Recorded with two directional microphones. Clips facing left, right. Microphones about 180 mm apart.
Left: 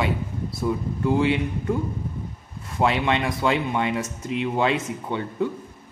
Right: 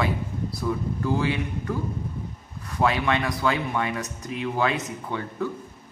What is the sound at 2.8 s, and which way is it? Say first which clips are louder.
Speech: left 1 dB; 25° left (ahead or behind).